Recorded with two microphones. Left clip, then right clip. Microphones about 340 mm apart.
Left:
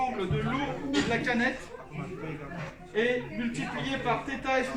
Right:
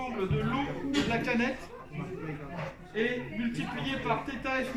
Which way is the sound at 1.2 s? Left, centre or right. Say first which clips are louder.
Left 2 dB; centre.